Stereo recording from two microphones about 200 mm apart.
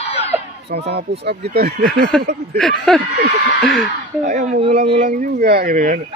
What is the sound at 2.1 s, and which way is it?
Speech, 5° left (ahead or behind).